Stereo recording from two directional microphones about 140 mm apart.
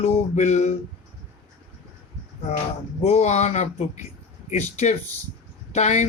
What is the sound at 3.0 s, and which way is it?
Speech, 55° left (ahead or behind).